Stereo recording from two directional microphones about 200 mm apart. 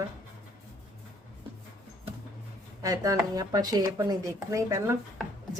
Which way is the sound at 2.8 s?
15° right (ahead or behind).